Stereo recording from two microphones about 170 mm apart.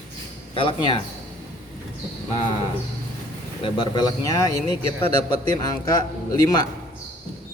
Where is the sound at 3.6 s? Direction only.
25° left (ahead or behind).